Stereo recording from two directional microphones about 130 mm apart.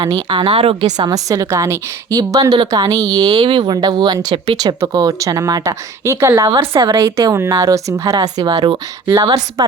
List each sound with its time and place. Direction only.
0.0 s a woman's voice: 30° right (ahead or behind)
1.0 s speech: 25° right (ahead or behind)
6.5 s speech: 35° right (ahead or behind)
6.9 s speech: 20° right (ahead or behind)